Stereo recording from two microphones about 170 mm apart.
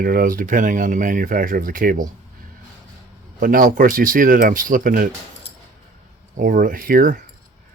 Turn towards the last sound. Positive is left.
turn(degrees=-55)  # may be behind; listen again after turning